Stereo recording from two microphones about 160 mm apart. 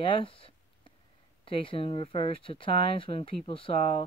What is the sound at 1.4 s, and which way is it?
Speech, 35° left (ahead or behind).